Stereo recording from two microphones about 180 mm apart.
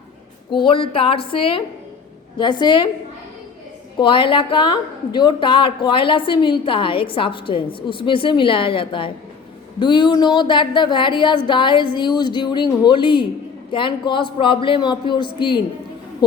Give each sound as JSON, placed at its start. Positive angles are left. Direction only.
{"t": 0.5, "sound": "a woman's voice", "side_deg": 25}
{"t": 3.9, "sound": "a woman's voice", "side_deg": 25}